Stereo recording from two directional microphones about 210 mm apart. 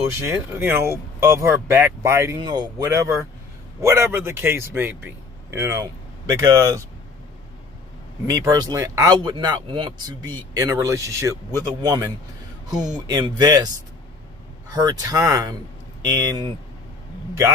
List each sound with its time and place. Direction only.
0.2 s a man's voice: 10° right (ahead or behind)
8.3 s speech: 15° right (ahead or behind)
14.7 s speech: 15° right (ahead or behind)